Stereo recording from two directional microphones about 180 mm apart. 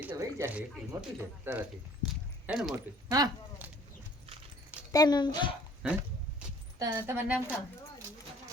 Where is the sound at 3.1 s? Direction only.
20° right (ahead or behind).